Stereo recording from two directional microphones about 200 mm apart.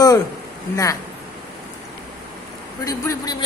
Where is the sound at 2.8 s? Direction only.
15° left (ahead or behind).